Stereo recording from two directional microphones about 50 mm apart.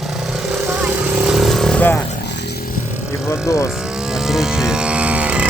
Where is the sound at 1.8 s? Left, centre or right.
Left.